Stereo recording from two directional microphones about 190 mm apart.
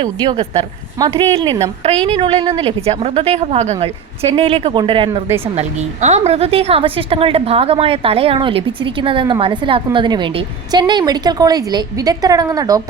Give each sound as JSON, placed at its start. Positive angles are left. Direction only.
{"t": 0.0, "sound": "a woman's voice", "side_deg": -25}
{"t": 1.8, "sound": "a woman's voice", "side_deg": -30}